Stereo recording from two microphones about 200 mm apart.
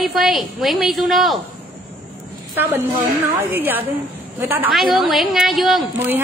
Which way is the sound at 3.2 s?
10° right (ahead or behind).